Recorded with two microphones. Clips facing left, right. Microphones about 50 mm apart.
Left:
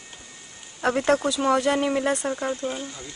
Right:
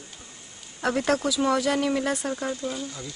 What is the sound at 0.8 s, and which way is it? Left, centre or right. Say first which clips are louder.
Speech: left 3 dB; left.